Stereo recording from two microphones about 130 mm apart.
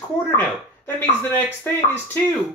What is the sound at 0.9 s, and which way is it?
Speech, 15° left (ahead or behind).